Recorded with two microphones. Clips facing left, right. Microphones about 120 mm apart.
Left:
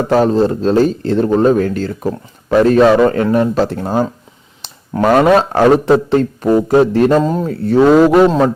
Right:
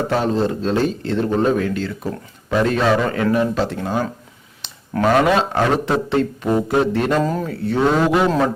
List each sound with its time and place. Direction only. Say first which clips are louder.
0.1 s speech: left 10 dB; 40° left (ahead or behind)
7.2 s speech: left 5 dB; 25° left (ahead or behind)
7.6 s speech: left 9 dB; 40° left (ahead or behind)